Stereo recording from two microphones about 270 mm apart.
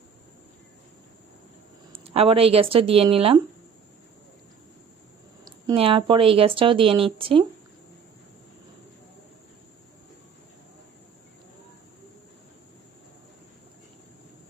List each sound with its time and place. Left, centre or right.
1.9 s speech: right
5.6 s a woman's voice: centre